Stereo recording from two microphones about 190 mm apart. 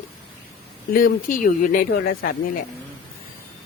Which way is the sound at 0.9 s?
45° left (ahead or behind).